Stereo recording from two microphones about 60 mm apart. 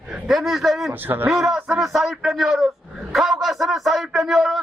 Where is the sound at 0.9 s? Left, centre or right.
Right.